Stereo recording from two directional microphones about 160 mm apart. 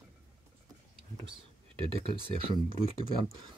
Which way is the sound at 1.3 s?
30° right (ahead or behind).